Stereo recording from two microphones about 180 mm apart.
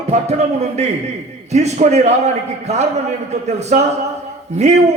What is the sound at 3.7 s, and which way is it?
A man's voice, 40° right (ahead or behind).